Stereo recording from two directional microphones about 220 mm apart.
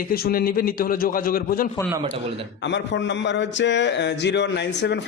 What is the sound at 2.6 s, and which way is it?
A man's voice, 55° left (ahead or behind).